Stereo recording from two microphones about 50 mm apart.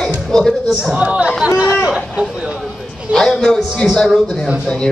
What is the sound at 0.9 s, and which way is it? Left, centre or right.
Speech, right.